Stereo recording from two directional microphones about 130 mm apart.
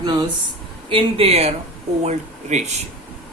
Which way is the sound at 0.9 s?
45° right (ahead or behind).